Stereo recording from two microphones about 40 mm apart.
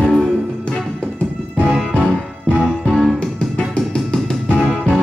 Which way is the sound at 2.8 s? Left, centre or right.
Centre.